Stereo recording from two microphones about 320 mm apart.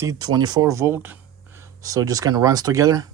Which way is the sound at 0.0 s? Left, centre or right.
Centre.